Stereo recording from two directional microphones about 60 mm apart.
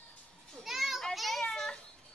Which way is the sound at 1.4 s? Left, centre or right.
Centre.